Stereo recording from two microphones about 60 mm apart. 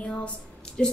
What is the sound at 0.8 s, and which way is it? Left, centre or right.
Speech, centre.